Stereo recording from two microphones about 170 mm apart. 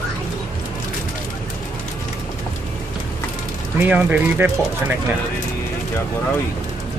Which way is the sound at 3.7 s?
10° right (ahead or behind).